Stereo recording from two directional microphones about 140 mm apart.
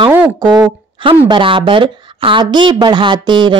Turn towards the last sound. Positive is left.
turn(degrees=-35)  # may be behind; listen again after turning